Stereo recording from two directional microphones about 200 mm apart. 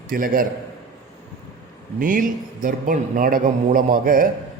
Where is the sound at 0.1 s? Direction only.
45° right (ahead or behind).